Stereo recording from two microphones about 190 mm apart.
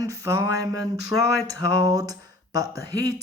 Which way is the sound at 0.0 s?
20° right (ahead or behind).